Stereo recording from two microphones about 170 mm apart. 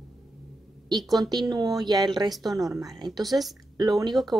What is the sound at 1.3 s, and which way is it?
Speech, 25° right (ahead or behind).